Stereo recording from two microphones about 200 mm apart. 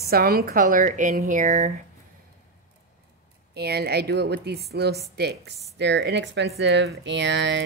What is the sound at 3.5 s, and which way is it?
A woman's voice, 55° right (ahead or behind).